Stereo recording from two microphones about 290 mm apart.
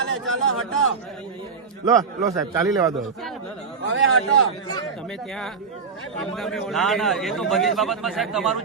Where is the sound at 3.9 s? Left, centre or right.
Right.